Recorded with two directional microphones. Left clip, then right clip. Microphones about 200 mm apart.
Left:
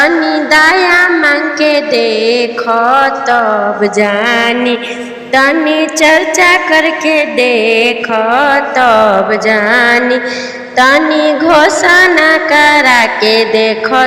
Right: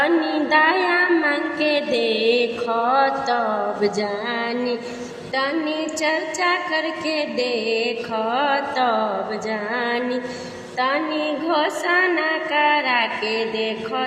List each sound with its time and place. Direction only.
0.0 s music: 30° left (ahead or behind)
0.9 s child singing: 30° left (ahead or behind)
2.0 s mantra: 65° left (ahead or behind)
2.3 s mantra: 25° left (ahead or behind)
3.8 s music: 30° left (ahead or behind)